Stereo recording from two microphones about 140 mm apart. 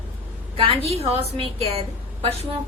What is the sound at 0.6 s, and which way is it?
A woman's voice, 45° right (ahead or behind).